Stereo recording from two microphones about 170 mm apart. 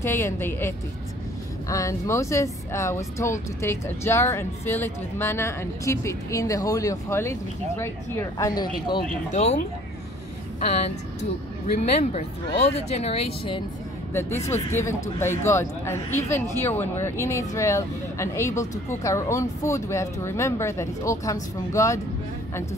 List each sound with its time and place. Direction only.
0.0 s speech: 15° left (ahead or behind)
9.3 s speech: 40° left (ahead or behind)
11.6 s speech: 45° left (ahead or behind)
14.4 s speech: 15° left (ahead or behind)